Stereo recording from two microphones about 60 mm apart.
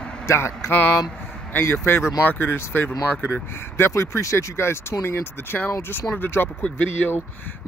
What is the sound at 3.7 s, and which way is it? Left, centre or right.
Speech, left.